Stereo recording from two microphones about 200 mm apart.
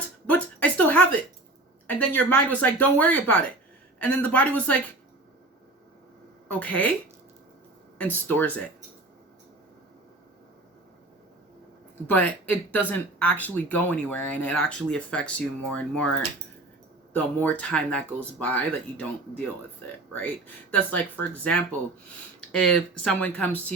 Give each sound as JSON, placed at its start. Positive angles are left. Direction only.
{"t": 0.3, "sound": "a sound", "side_deg": 5}
{"t": 1.9, "sound": "speech", "side_deg": 10}
{"t": 6.5, "sound": "speech", "side_deg": 10}
{"t": 8.0, "sound": "speech", "side_deg": 10}
{"t": 12.0, "sound": "speech", "side_deg": 10}
{"t": 20.7, "sound": "speech", "side_deg": 10}
{"t": 23.0, "sound": "speech", "side_deg": 5}